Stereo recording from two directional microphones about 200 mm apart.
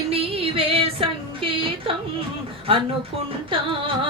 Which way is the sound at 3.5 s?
25° right (ahead or behind).